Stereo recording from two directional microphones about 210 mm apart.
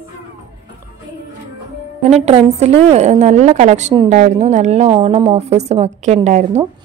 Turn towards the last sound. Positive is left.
turn(degrees=-35)  # may be behind; listen again after turning